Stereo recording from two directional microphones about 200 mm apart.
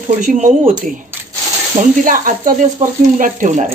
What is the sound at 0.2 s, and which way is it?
Speech, 40° right (ahead or behind).